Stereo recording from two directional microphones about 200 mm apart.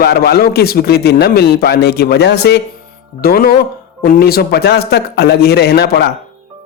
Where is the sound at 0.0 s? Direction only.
55° left (ahead or behind).